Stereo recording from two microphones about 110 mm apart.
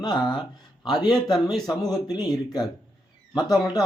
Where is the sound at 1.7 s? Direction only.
35° left (ahead or behind).